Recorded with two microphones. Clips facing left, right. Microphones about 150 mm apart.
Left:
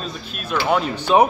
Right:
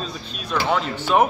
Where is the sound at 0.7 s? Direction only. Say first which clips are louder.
Left 4 dB; 15° left (ahead or behind).